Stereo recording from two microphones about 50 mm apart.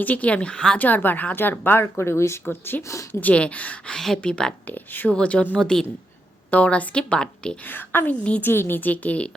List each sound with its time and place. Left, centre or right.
0.0 s a woman's voice: left; by 0.8 s centre
0.8 s a woman's voice: left
2.0 s speech: left
2.4 s a woman's voice: left
2.8 s a woman's voice: left
3.1 s a woman's voice: left
3.3 s a woman's voice: left
3.9 s speech: centre
4.6 s a woman's voice: left
5.1 s a woman's voice: left
5.5 s speech: centre
6.5 s a woman's voice: left
7.6 s a woman's voice: left
8.8 s a woman's voice: left